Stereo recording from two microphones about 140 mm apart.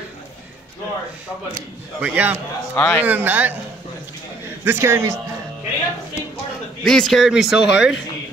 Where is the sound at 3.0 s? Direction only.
10° right (ahead or behind).